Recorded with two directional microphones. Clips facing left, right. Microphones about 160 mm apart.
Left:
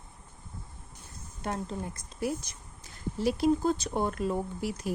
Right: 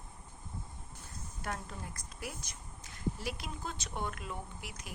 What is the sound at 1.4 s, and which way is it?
A woman's voice, 25° left (ahead or behind).